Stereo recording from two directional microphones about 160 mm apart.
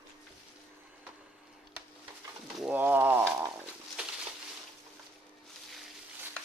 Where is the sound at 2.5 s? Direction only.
5° right (ahead or behind).